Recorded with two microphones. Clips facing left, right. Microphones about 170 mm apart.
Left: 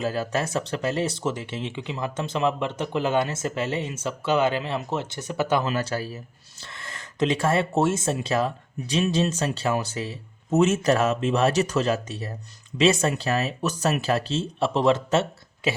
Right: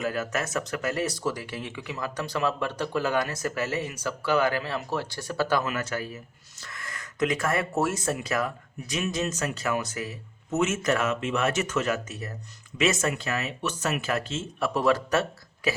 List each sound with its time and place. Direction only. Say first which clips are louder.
0.0 s speech: left 3 dB; 30° left (ahead or behind)